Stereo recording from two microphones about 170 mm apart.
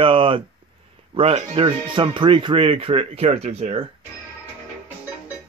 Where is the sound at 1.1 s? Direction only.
35° right (ahead or behind).